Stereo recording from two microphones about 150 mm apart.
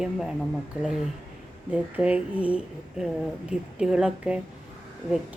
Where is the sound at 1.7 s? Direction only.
10° right (ahead or behind).